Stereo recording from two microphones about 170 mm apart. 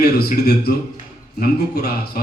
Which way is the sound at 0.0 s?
65° left (ahead or behind).